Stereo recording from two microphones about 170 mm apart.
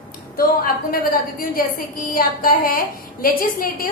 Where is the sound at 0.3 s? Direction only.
55° left (ahead or behind).